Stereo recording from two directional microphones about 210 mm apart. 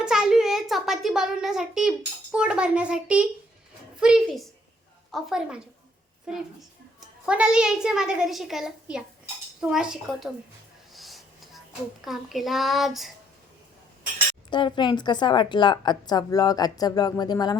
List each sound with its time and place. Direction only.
0.0 s a child's voice: 5° right (ahead or behind)
10.9 s a sound: centre (ahead or behind)
12.0 s a child's voice: centre (ahead or behind)
14.5 s a woman's voice: 20° left (ahead or behind)